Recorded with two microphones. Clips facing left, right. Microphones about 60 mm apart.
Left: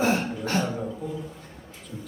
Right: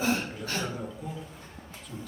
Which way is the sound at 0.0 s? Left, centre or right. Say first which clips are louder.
Left 5 dB; left.